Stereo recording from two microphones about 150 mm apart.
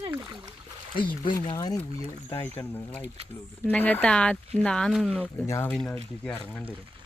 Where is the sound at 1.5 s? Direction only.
25° left (ahead or behind).